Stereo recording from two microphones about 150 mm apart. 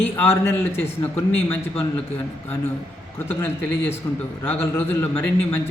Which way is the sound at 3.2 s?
15° left (ahead or behind).